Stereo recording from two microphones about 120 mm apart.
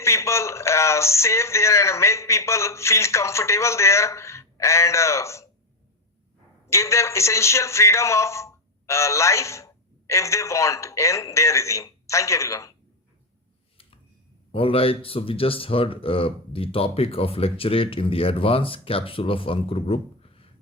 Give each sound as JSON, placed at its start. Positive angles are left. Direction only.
{"t": 0.0, "sound": "a man's voice", "side_deg": 25}
{"t": 6.7, "sound": "a man's voice", "side_deg": 25}
{"t": 14.5, "sound": "speech", "side_deg": 50}